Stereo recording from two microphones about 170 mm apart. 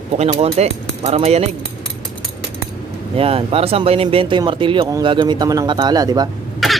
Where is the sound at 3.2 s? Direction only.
35° right (ahead or behind).